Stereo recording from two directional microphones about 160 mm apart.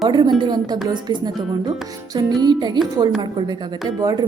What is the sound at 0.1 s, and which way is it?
Speech, 30° right (ahead or behind).